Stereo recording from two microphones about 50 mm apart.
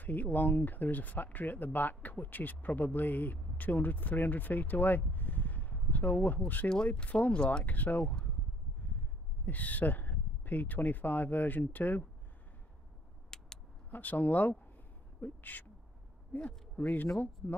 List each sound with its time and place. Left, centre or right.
0.0 s speech: left
7.6 s speech: left
9.5 s speech: left
13.3 s vehicle: centre
13.8 s speech: left